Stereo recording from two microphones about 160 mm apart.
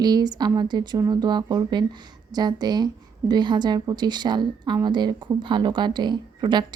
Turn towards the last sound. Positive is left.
turn(degrees=-30)  # may be behind; listen again after turning